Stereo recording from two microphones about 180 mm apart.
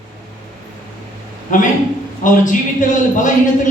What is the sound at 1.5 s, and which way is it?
A man's voice, 45° left (ahead or behind).